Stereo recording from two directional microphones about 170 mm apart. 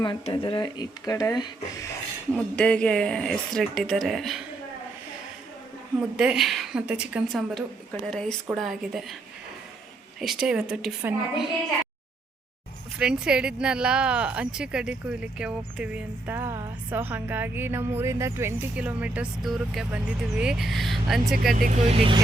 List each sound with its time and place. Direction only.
0.0 s speech: 30° left (ahead or behind)
2.3 s speech: 5° left (ahead or behind)
6.0 s speech: 5° right (ahead or behind)
10.4 s speech: 5° right (ahead or behind)
13.0 s speech: 5° right (ahead or behind)
21.5 s speech: 50° right (ahead or behind); by 22.2 s 35° right (ahead or behind)